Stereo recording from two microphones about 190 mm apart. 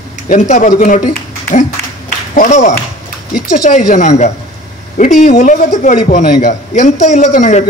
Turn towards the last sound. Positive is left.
turn(degrees=40)  # may be behind; listen again after turning